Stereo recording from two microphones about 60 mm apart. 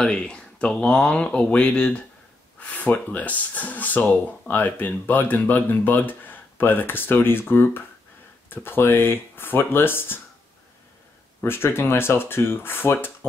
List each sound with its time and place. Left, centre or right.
0.0 s speech: centre
2.6 s speech: left
11.4 s speech: left